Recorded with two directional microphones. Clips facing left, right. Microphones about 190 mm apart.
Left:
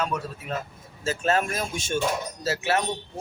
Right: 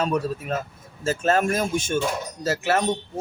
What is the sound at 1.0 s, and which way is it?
A man's voice, 45° right (ahead or behind).